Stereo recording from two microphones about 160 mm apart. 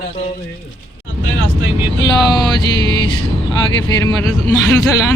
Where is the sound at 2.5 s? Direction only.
30° left (ahead or behind).